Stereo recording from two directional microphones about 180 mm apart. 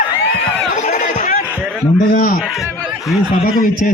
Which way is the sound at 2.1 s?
50° left (ahead or behind).